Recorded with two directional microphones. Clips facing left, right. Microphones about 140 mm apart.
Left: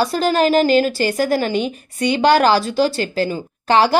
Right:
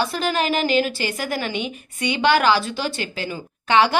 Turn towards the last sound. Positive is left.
turn(degrees=35)  # may be behind; listen again after turning